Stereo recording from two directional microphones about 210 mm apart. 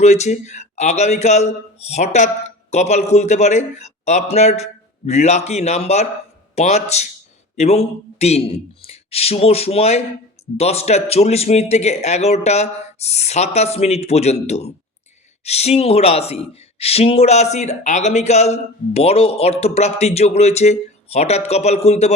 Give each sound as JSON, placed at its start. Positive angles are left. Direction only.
{"t": 0.0, "sound": "a man's voice", "side_deg": 35}